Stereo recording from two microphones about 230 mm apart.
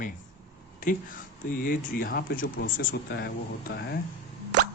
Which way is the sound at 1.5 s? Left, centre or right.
Left.